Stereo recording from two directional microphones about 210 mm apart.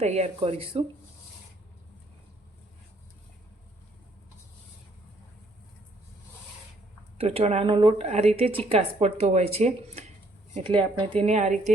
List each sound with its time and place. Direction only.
0.0 s speech: 30° right (ahead or behind)
7.2 s a woman's voice: 30° right (ahead or behind)